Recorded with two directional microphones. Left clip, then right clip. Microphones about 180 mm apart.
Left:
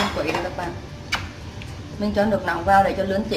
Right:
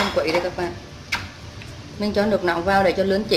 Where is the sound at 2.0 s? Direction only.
50° right (ahead or behind).